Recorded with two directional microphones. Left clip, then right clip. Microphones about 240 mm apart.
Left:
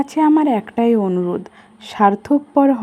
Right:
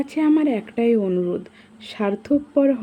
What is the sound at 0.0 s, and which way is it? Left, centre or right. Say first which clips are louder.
Speech: left 5 dB; centre.